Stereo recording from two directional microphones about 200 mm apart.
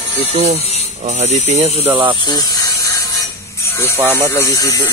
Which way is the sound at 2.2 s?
20° left (ahead or behind).